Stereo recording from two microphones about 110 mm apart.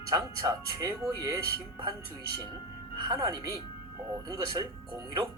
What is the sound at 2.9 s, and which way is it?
Speech, 40° right (ahead or behind).